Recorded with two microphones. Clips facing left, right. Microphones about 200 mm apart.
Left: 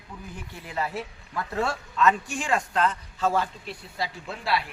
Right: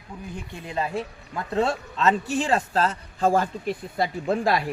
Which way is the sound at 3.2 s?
50° right (ahead or behind).